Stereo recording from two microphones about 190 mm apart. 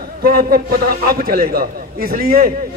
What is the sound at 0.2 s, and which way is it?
A man's voice, 50° right (ahead or behind).